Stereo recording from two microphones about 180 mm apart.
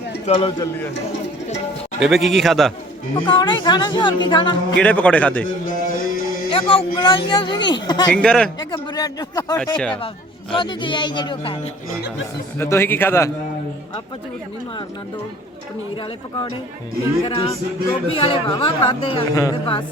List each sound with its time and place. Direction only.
0.3 s a man's voice: 30° left (ahead or behind)
2.0 s a man's voice: centre (ahead or behind)
3.2 s speech: 25° left (ahead or behind)
4.8 s a man's voice: 5° left (ahead or behind)
5.6 s music: 50° left (ahead or behind)
6.5 s speech: 30° left (ahead or behind)
8.1 s a man's voice: 5° left (ahead or behind)
8.5 s speech: 25° left (ahead or behind)
9.6 s a man's voice: 5° left (ahead or behind)
10.5 s speech: 25° left (ahead or behind)
12.5 s a man's voice: 15° left (ahead or behind)
17.2 s speech: 30° left (ahead or behind)